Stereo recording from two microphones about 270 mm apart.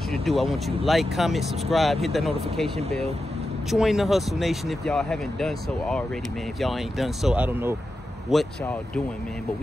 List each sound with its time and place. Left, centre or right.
0.1 s speech: centre
3.7 s speech: centre